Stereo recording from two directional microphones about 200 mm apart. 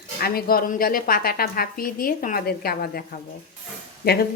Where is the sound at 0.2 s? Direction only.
50° left (ahead or behind).